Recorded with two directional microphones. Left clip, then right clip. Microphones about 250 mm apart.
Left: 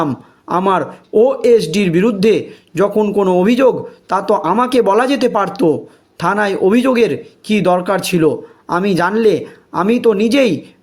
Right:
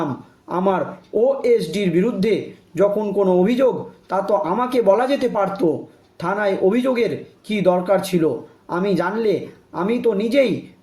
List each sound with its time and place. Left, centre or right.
0.0 s a man's voice: left